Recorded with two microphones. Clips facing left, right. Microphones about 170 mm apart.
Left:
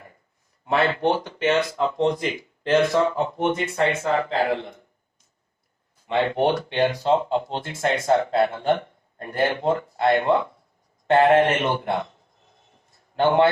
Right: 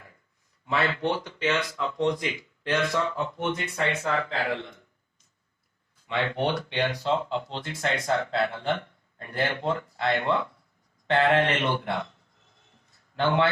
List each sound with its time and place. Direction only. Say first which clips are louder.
0.6 s speech: left 6 dB; 55° left (ahead or behind)
6.1 s speech: left 6 dB; 50° left (ahead or behind)
13.1 s speech: left 6 dB; 55° left (ahead or behind)